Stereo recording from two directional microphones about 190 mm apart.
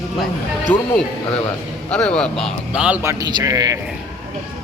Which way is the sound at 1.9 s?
5° left (ahead or behind).